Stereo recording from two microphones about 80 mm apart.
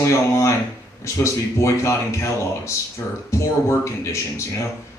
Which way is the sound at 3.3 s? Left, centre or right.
Left.